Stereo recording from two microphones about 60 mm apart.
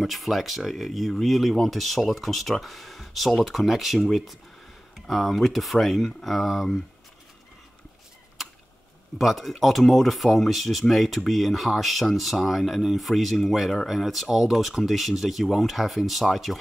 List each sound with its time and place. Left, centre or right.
0.0 s speech: centre
9.2 s speech: centre